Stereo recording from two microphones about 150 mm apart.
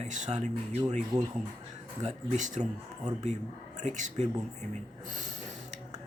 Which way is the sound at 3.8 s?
50° right (ahead or behind).